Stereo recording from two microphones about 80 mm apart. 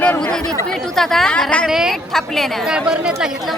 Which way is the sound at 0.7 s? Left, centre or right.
Centre.